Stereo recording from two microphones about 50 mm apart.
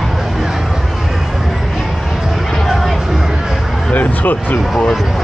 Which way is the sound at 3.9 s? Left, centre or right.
Left.